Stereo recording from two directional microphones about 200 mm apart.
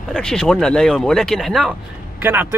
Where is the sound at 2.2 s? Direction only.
10° right (ahead or behind).